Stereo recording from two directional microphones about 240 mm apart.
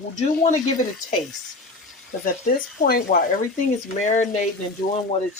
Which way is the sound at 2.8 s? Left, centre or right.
Left.